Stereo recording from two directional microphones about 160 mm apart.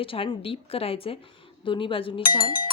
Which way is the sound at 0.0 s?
35° left (ahead or behind).